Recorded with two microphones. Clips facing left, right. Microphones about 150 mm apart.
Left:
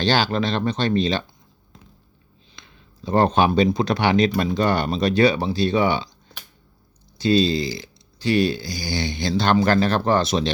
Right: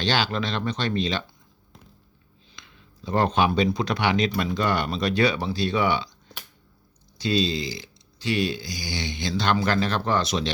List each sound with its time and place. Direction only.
0.0 s speech: 35° left (ahead or behind)
2.6 s a sound: 35° left (ahead or behind)
3.7 s speech: 30° left (ahead or behind)
7.2 s speech: 35° left (ahead or behind)